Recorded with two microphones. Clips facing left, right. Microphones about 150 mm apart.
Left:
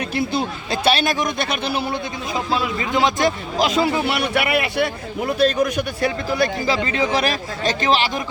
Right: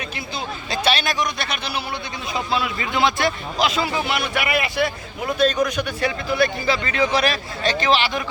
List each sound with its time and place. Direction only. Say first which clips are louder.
0.3 s speech: left 4 dB; 50° left (ahead or behind)
2.5 s a man's voice: left 3 dB; 40° left (ahead or behind)
4.0 s speech: left 3 dB; 65° left (ahead or behind)
6.0 s a man's voice: even; 35° left (ahead or behind)